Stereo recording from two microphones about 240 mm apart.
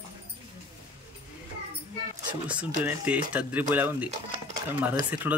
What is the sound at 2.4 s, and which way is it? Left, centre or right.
Speech, centre.